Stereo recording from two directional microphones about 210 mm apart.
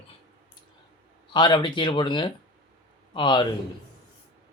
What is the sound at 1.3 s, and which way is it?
Speech, 20° left (ahead or behind).